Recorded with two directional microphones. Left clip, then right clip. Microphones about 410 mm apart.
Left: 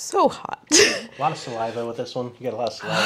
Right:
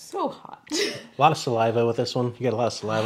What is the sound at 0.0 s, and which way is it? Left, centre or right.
A woman's voice, left.